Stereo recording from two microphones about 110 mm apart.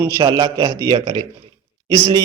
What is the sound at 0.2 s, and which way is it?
A man's voice, 40° right (ahead or behind).